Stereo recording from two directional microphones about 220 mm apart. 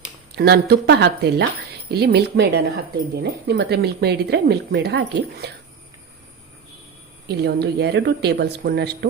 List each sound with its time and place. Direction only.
0.3 s speech: 45° right (ahead or behind)
7.3 s speech: 50° right (ahead or behind)